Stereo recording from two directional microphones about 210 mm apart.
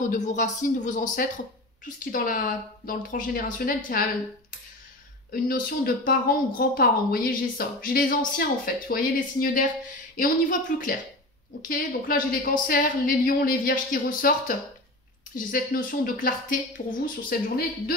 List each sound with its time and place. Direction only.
0.1 s a woman's voice: 35° left (ahead or behind)
5.3 s a woman's voice: 45° left (ahead or behind)